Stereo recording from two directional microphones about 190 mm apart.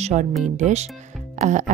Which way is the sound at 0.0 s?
35° right (ahead or behind).